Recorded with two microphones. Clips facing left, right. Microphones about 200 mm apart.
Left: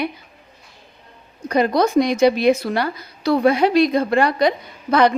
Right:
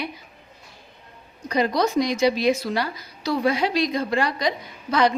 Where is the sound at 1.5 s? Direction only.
55° left (ahead or behind).